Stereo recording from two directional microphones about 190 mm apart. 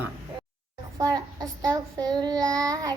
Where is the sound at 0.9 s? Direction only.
20° right (ahead or behind).